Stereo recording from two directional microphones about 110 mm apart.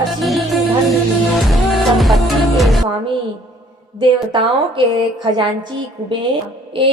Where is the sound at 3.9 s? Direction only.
50° right (ahead or behind).